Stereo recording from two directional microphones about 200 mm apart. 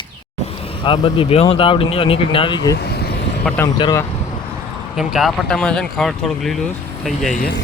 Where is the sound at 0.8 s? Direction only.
25° left (ahead or behind).